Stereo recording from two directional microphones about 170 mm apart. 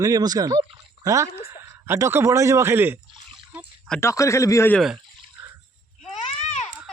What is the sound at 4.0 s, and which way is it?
Speech, 15° left (ahead or behind).